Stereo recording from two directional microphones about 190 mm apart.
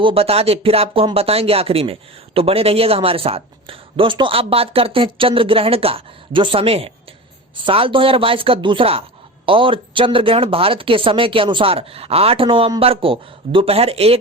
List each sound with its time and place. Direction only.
0.0 s speech: 30° right (ahead or behind)